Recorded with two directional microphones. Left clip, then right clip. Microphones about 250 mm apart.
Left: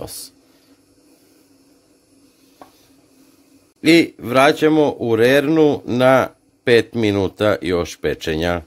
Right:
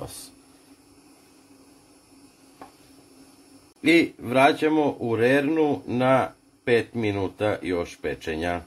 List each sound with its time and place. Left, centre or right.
3.8 s speech: left